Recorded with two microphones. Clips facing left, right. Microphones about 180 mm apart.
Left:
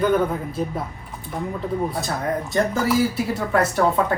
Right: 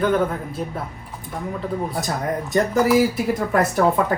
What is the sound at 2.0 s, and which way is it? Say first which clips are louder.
Speech: even; 20° right (ahead or behind).